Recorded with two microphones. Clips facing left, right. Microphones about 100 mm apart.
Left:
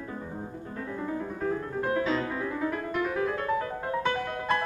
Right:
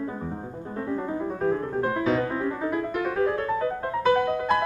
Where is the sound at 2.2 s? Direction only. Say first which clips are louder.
Right 3 dB; 30° right (ahead or behind).